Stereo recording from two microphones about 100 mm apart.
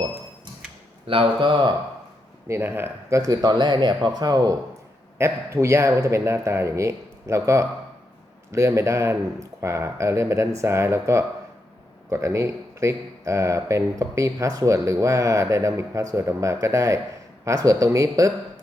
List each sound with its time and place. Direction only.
1.0 s speech: 60° right (ahead or behind)
2.5 s speech: 25° right (ahead or behind)
3.2 s speech: 40° right (ahead or behind)
5.1 s speech: 25° right (ahead or behind)